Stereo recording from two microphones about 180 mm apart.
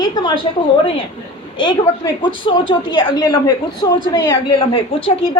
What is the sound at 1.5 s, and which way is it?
A woman's voice, 25° left (ahead or behind).